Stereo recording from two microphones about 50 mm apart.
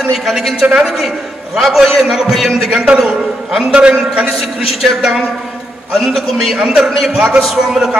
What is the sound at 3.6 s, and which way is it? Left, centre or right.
Speech, right.